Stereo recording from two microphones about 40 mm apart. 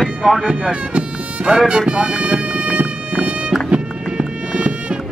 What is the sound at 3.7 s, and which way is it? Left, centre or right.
Bagpipes, right.